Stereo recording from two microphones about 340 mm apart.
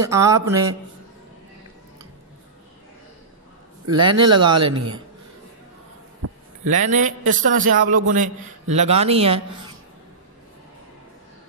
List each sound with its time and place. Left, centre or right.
0.0 s a man's voice: centre
3.9 s a man's voice: centre
6.2 s heart sounds: right
6.6 s a man's voice: right